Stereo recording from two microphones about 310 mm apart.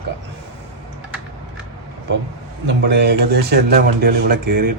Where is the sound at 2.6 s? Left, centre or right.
Right.